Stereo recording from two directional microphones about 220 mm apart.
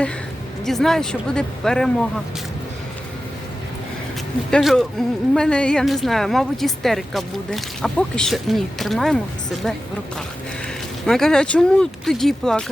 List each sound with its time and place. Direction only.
0.6 s speech: centre (ahead or behind)
4.5 s speech: centre (ahead or behind)
11.0 s speech: centre (ahead or behind)